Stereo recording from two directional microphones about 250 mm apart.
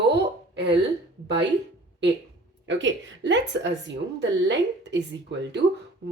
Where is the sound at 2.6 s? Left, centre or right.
Right.